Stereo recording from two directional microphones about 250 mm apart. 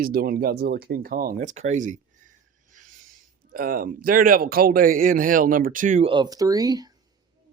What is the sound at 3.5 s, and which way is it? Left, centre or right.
Speech, right.